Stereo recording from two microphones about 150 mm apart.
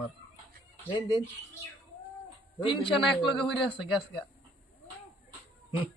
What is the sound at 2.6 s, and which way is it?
Speech, 35° left (ahead or behind).